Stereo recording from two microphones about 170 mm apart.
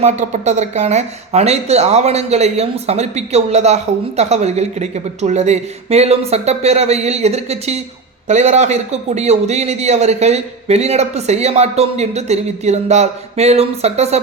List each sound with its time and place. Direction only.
0.0 s a man's voice: 45° right (ahead or behind)